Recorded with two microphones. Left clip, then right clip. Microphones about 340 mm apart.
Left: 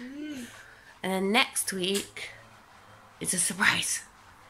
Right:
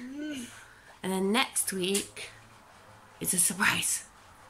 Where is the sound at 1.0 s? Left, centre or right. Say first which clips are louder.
Left 3 dB; centre.